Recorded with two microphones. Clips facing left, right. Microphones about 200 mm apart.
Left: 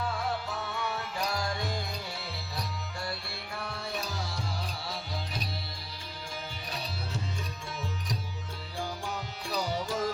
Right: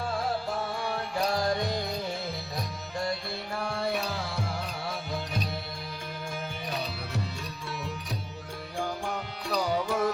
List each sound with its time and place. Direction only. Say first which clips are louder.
0.4 s music: right 4 dB; 50° right (ahead or behind)
3.7 s music: right 8 dB; 65° right (ahead or behind)
8.8 s music: right 3 dB; 55° right (ahead or behind)